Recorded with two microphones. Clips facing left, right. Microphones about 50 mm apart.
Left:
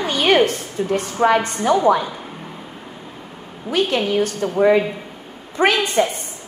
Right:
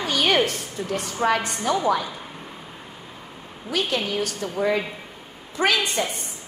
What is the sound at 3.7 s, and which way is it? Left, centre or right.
A woman's voice, left.